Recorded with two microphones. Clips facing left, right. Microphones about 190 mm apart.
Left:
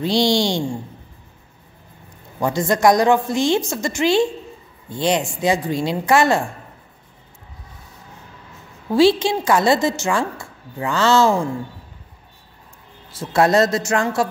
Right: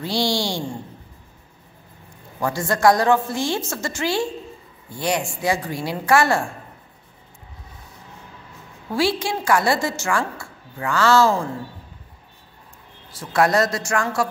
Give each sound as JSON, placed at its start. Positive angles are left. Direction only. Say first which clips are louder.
{"t": 0.0, "sound": "a woman's voice", "louder": "left 5 dB", "side_deg": 20}
{"t": 2.4, "sound": "a woman's voice", "louder": "left 2 dB", "side_deg": 20}
{"t": 8.9, "sound": "a woman's voice", "louder": "left 7 dB", "side_deg": 20}
{"t": 13.1, "sound": "a woman's voice", "louder": "left 3 dB", "side_deg": 25}